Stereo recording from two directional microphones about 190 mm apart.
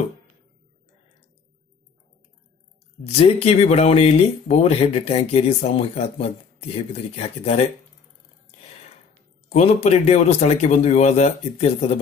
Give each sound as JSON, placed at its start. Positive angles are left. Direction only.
{"t": 3.1, "sound": "speech", "side_deg": 30}
{"t": 9.5, "sound": "speech", "side_deg": 35}